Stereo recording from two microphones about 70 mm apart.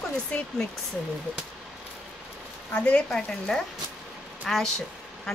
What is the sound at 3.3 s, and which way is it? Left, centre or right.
Speech, centre.